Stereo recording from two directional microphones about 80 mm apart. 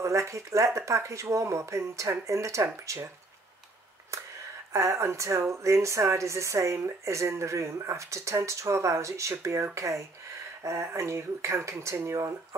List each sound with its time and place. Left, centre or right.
0.0 s speech: right
4.1 s a sound: right
4.7 s speech: right